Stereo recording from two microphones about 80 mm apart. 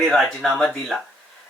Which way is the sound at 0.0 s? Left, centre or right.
Centre.